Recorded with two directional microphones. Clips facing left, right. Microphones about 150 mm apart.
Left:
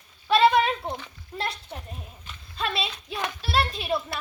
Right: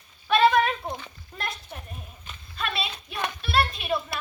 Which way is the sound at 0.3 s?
25° left (ahead or behind).